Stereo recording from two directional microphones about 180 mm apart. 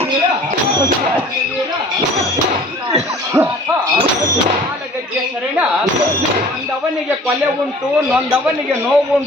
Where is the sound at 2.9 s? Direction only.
15° right (ahead or behind).